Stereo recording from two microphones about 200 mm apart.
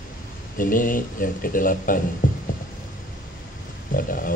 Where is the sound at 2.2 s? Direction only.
40° left (ahead or behind).